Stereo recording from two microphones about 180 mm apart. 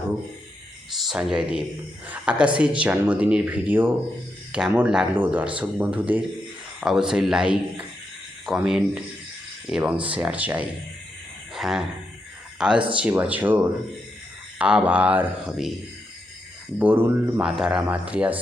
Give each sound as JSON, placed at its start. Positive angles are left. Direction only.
{"t": 0.9, "sound": "speech", "side_deg": 0}
{"t": 11.5, "sound": "a sound", "side_deg": 0}
{"t": 12.5, "sound": "speech", "side_deg": -5}
{"t": 16.7, "sound": "speech", "side_deg": -10}